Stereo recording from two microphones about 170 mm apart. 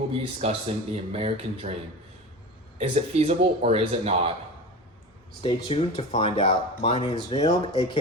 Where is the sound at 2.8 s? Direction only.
40° right (ahead or behind).